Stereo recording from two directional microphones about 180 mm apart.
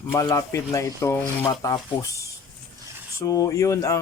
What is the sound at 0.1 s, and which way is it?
Speech, 15° left (ahead or behind).